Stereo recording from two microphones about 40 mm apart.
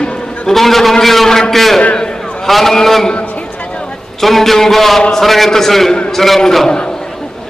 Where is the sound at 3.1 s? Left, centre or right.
Left.